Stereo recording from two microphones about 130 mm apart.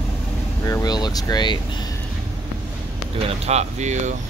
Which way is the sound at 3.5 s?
60° right (ahead or behind).